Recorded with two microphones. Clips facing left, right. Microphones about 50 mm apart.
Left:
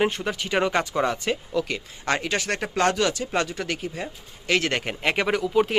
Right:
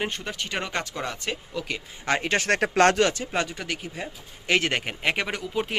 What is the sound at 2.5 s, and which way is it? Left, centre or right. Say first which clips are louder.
Speech: right 4 dB; right.